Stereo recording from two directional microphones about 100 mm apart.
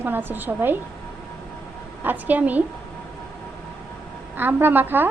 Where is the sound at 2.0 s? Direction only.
15° right (ahead or behind).